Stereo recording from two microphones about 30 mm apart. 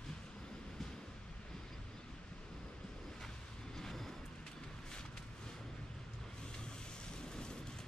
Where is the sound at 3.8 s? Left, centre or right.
Centre.